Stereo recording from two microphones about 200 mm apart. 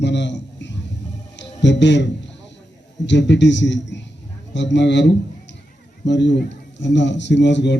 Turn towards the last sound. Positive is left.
turn(degrees=65)  # may be behind; listen again after turning